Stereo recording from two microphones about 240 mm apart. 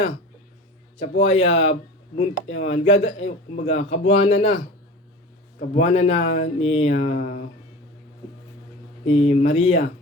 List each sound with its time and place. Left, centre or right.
0.9 s speech: left
5.5 s speech: left
9.0 s speech: left